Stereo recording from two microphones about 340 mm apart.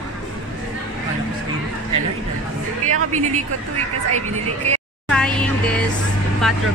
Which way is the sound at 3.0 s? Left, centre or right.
Right.